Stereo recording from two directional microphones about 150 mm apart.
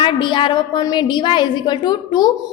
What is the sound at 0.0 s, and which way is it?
A woman's voice, 35° left (ahead or behind).